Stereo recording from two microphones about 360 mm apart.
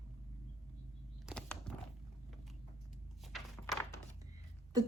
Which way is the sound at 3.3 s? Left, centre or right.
Centre.